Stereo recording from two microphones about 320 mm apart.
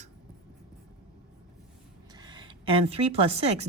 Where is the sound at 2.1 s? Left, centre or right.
Centre.